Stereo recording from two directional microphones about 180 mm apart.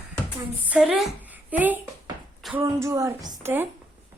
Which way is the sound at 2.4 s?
Centre (ahead or behind).